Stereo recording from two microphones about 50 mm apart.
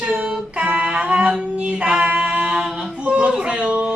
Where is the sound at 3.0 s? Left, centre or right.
Right.